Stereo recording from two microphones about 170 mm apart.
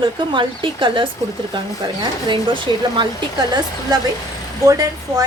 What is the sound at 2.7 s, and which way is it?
Speech, 20° left (ahead or behind).